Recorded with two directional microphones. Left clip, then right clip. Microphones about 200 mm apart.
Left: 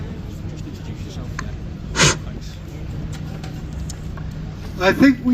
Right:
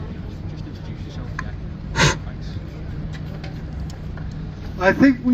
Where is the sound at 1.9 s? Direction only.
35° right (ahead or behind).